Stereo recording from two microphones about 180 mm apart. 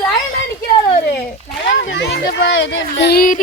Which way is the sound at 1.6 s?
85° left.